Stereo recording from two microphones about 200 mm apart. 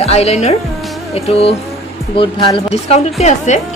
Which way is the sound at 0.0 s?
30° left (ahead or behind).